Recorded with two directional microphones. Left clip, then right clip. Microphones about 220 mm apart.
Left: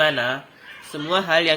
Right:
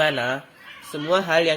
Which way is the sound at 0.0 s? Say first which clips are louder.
Left 2 dB; 35° right (ahead or behind).